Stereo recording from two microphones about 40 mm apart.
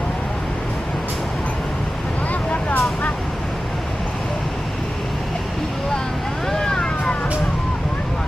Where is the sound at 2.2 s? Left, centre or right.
Left.